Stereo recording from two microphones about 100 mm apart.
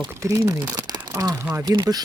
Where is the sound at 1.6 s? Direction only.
40° right (ahead or behind).